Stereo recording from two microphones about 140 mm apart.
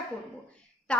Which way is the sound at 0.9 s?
10° left (ahead or behind).